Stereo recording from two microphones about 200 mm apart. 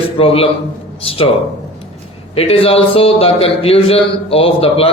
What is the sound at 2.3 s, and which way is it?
A man's voice, 30° left (ahead or behind).